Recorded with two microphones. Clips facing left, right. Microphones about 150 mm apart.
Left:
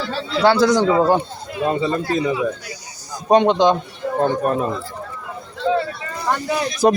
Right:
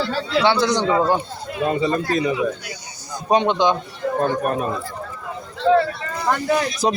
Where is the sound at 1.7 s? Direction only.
25° left (ahead or behind).